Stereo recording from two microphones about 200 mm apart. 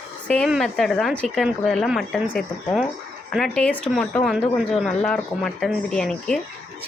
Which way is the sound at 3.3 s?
5° left (ahead or behind).